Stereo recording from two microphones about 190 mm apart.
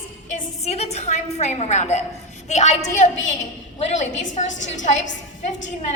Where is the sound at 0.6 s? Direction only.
35° left (ahead or behind).